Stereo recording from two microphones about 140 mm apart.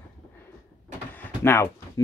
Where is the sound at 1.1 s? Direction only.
15° left (ahead or behind).